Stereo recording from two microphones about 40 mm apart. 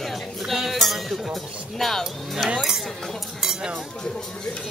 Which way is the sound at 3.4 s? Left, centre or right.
Centre.